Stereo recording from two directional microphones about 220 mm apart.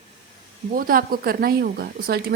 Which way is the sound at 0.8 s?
40° right (ahead or behind).